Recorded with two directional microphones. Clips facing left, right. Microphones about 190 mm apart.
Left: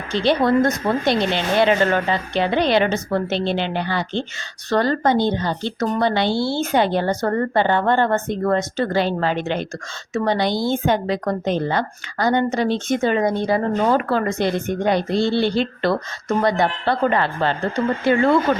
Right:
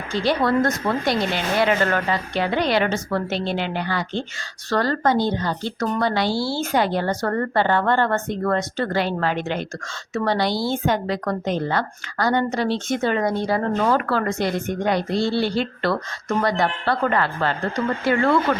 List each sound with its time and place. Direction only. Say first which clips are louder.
0.1 s a woman's voice: left 3 dB; 20° left (ahead or behind)